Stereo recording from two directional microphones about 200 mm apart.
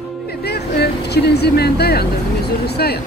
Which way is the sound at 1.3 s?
55° left (ahead or behind).